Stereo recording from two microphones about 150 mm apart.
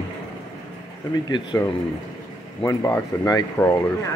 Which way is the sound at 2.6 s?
20° left (ahead or behind).